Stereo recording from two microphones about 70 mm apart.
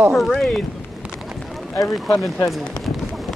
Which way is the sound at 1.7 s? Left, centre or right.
Left.